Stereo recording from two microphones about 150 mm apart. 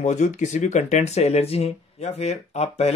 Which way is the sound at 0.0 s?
50° left (ahead or behind).